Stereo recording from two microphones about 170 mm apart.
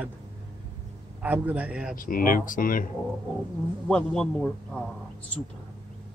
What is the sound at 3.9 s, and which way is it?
Speech, 5° left (ahead or behind).